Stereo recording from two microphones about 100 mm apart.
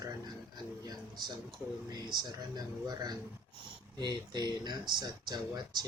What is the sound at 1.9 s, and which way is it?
Speech, 45° right (ahead or behind).